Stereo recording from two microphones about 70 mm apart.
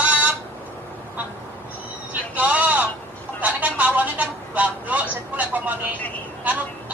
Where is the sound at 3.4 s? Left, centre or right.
Right.